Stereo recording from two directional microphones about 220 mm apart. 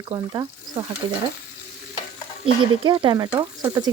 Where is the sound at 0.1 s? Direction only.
10° right (ahead or behind).